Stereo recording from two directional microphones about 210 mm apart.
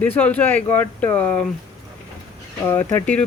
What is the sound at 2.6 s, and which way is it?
Speech, 10° left (ahead or behind).